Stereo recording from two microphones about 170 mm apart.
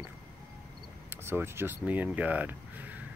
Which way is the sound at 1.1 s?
15° right (ahead or behind).